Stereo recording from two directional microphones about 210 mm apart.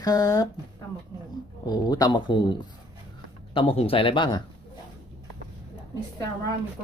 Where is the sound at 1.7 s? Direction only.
20° left (ahead or behind).